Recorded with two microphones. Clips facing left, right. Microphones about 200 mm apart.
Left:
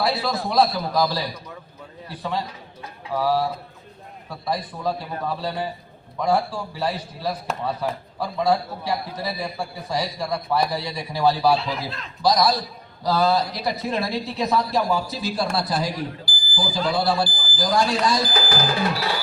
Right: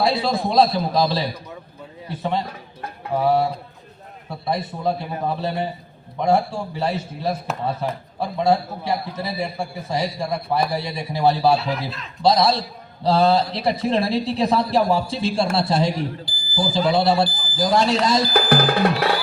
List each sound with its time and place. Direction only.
0.0 s a man's voice: 25° right (ahead or behind)
2.5 s a sound: 55° right (ahead or behind)
3.2 s a man's voice: 25° right (ahead or behind)
11.5 s a man's voice: 5° right (ahead or behind)
12.2 s a man's voice: 25° right (ahead or behind)
18.3 s drum: 60° right (ahead or behind)